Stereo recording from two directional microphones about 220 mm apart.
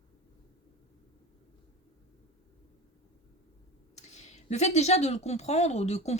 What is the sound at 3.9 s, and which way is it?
Speech, 30° left (ahead or behind).